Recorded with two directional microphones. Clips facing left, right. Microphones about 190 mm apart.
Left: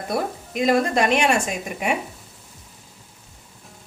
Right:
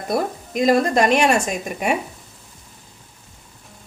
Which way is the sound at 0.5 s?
40° right (ahead or behind).